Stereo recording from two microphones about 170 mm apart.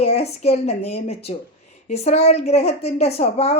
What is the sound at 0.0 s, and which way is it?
A woman's voice, 40° left (ahead or behind).